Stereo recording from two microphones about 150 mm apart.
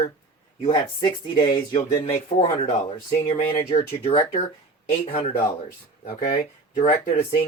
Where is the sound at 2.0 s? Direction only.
40° left (ahead or behind).